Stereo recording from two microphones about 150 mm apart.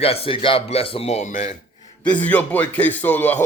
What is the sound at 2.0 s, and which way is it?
A man's voice, 10° left (ahead or behind).